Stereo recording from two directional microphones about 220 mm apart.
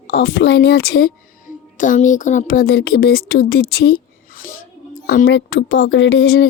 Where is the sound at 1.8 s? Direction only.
35° left (ahead or behind).